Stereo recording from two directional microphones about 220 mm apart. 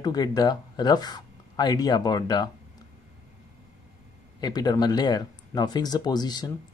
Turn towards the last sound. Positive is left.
turn(degrees=20)  # may be behind; listen again after turning